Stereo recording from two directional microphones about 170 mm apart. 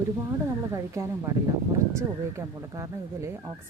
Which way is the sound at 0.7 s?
20° right (ahead or behind).